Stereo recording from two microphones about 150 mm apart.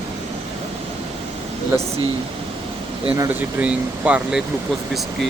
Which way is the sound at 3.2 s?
10° right (ahead or behind).